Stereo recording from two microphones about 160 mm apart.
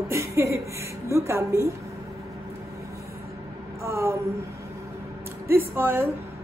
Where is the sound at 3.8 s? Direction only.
20° right (ahead or behind).